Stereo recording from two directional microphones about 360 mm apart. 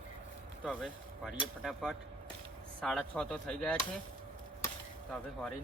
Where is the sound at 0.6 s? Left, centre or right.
Centre.